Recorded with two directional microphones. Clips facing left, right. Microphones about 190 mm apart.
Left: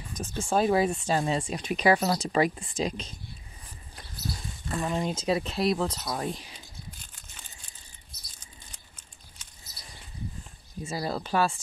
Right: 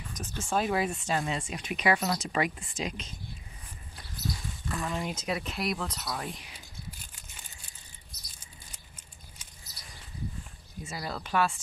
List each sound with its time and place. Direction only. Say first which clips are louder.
0.1 s speech: left 4 dB; 30° left (ahead or behind)
4.6 s speech: left 4 dB; 25° left (ahead or behind)
8.7 s a sound: right 1 dB; 10° right (ahead or behind)
10.8 s speech: left 6 dB; 30° left (ahead or behind)